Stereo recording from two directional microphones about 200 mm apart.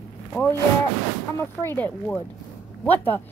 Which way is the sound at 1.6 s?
10° left (ahead or behind).